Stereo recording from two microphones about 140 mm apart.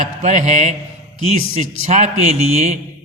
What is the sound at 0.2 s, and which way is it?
A man's voice, 55° right (ahead or behind).